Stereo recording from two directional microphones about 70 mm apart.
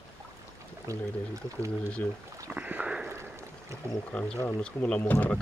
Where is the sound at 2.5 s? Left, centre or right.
Centre.